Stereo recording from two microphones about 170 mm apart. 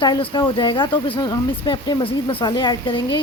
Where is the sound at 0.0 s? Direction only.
25° left (ahead or behind).